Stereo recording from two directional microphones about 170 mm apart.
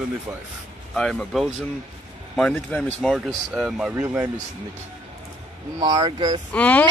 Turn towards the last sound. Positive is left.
turn(degrees=10)  # may be behind; listen again after turning